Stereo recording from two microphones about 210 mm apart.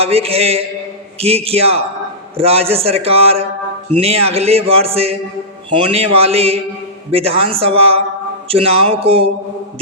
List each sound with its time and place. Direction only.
0.0 s speech: 30° right (ahead or behind)